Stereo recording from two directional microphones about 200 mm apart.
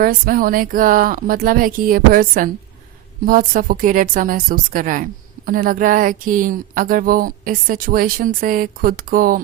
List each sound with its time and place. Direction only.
0.0 s speech: 45° right (ahead or behind)